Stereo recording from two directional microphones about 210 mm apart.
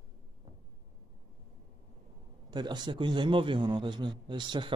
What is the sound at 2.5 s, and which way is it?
A man's voice, 20° right (ahead or behind).